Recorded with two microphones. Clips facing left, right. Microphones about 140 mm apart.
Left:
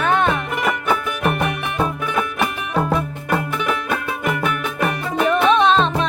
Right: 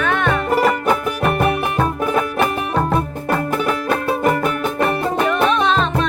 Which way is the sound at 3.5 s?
40° right (ahead or behind).